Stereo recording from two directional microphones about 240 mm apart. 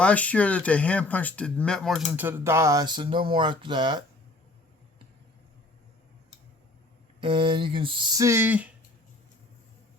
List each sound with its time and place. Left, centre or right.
0.0 s speech: centre
7.2 s speech: right